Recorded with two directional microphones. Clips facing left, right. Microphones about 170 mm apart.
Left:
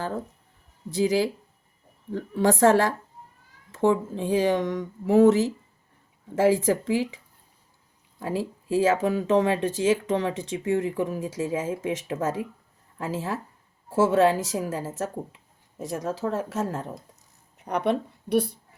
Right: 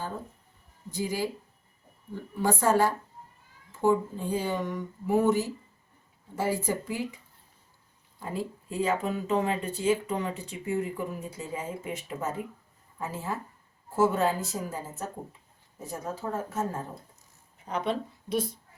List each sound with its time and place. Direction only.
0.9 s speech: 90° left
8.2 s speech: 90° left
17.7 s speech: 65° left (ahead or behind)